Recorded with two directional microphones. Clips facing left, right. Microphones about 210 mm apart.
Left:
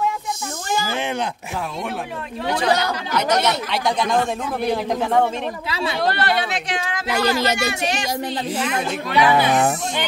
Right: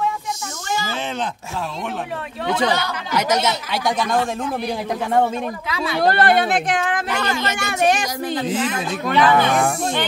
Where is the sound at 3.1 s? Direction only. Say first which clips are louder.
Right 1 dB; 10° right (ahead or behind).